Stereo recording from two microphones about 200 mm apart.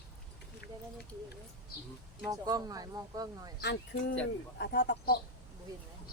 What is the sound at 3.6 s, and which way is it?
Speech, 55° left (ahead or behind).